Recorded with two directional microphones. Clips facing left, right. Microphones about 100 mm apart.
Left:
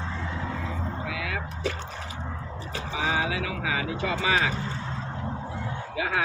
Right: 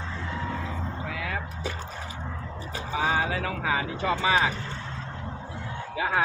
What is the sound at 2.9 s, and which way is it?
Speech, 40° right (ahead or behind).